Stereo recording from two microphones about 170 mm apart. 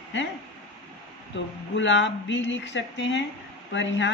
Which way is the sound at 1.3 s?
90° left.